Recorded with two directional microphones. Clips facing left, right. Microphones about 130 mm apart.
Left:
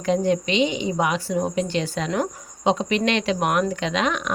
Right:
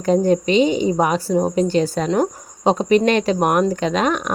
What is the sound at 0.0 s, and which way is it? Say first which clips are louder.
Speech: right 5 dB; 40° right (ahead or behind).